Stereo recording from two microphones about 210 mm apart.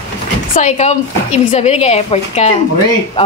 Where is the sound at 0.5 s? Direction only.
35° left (ahead or behind).